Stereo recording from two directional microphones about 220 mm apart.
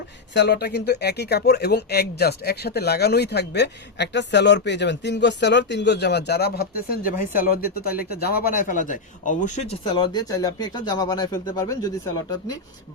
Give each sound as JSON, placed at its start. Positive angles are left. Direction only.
{"t": 0.3, "sound": "speech", "side_deg": 50}
{"t": 9.9, "sound": "speech", "side_deg": 20}